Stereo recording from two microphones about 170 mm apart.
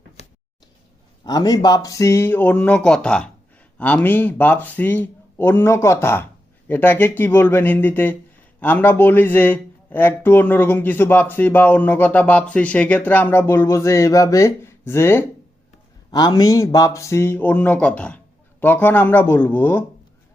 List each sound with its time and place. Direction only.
1.2 s a man's voice: 25° left (ahead or behind)